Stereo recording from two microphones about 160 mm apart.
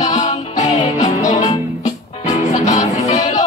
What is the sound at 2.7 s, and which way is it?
Music, 50° left (ahead or behind).